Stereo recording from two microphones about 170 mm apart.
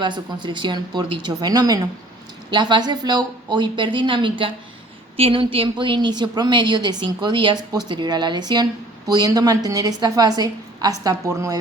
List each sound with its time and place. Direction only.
0.0 s speech: 25° right (ahead or behind)